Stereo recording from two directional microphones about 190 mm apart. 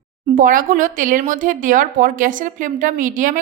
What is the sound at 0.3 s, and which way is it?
A woman's voice, 45° right (ahead or behind).